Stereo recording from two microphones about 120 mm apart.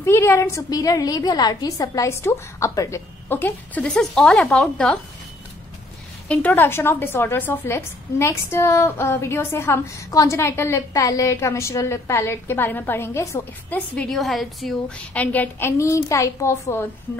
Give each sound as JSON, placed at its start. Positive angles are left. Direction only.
{"t": 0.0, "sound": "a woman's voice", "side_deg": 20}
{"t": 6.2, "sound": "a woman's voice", "side_deg": 10}
{"t": 13.7, "sound": "a woman's voice", "side_deg": 10}
{"t": 15.0, "sound": "a woman's voice", "side_deg": 15}
{"t": 15.8, "sound": "a woman's voice", "side_deg": 25}